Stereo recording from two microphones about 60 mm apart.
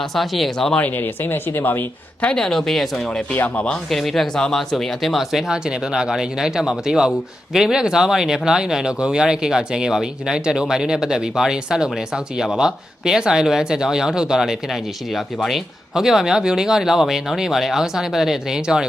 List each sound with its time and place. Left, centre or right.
0.0 s speech: centre
0.8 s speech: left
2.3 s speech: centre
3.3 s speech: left
3.8 s speech: centre